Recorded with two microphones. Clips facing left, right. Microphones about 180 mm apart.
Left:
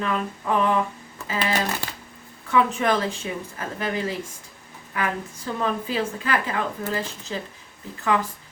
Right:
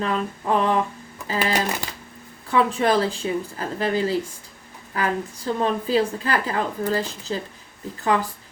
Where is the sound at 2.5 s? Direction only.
35° right (ahead or behind).